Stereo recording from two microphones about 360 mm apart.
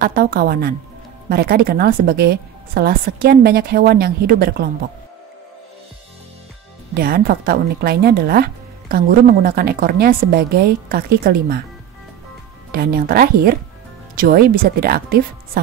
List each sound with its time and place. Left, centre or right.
0.0 s a woman's voice: right
6.9 s a woman's voice: right
12.7 s a woman's voice: right